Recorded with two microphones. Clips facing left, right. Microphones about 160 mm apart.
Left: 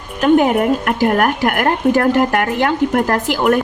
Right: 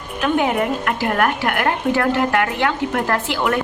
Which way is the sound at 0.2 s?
45° left (ahead or behind).